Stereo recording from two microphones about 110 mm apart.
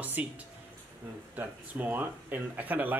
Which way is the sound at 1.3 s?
15° right (ahead or behind).